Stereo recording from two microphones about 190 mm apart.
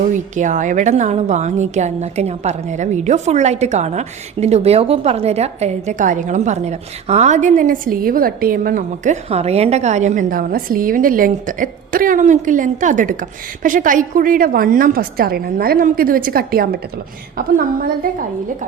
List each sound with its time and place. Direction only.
0.1 s a woman's voice: 40° right (ahead or behind)